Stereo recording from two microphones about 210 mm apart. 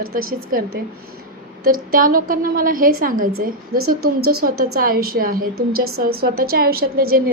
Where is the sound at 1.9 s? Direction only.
40° right (ahead or behind).